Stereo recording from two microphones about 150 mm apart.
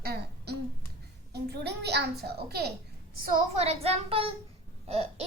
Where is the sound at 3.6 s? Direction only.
45° right (ahead or behind).